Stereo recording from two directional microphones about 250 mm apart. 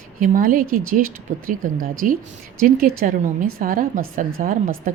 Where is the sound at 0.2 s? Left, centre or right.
Right.